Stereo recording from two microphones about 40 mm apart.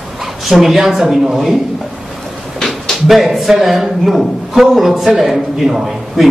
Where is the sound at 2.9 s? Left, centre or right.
Centre.